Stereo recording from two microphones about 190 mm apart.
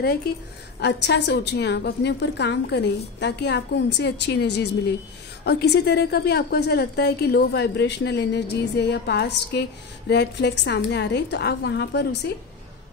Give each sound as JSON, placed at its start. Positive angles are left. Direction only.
{"t": 0.7, "sound": "a woman's voice", "side_deg": 65}